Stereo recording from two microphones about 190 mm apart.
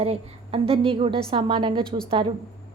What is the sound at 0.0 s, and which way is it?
A woman's voice, 30° right (ahead or behind).